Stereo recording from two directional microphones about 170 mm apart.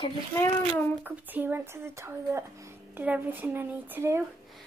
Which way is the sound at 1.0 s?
10° right (ahead or behind).